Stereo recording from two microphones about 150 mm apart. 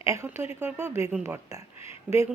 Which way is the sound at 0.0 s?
20° right (ahead or behind).